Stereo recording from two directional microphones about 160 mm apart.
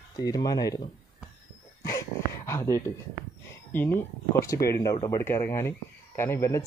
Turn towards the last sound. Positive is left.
turn(degrees=20)  # may be behind; listen again after turning